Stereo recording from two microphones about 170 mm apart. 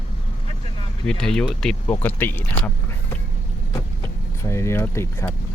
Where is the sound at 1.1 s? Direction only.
5° left (ahead or behind).